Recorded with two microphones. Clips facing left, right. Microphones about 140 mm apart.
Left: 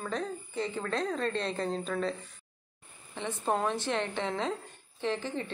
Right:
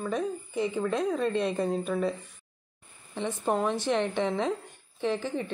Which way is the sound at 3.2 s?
15° right (ahead or behind).